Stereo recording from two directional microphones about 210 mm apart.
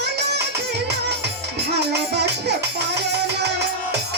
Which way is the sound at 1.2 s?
55° right (ahead or behind).